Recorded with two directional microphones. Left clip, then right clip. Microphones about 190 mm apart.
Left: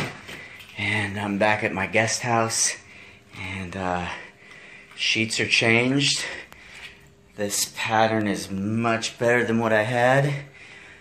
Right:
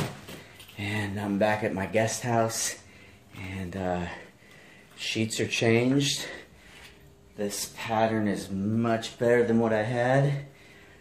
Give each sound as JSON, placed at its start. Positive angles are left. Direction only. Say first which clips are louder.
{"t": 0.7, "sound": "speech", "louder": "left 8 dB", "side_deg": 0}
{"t": 7.3, "sound": "speech", "louder": "left 6 dB", "side_deg": 25}
{"t": 8.7, "sound": "speech", "louder": "left 4 dB", "side_deg": 5}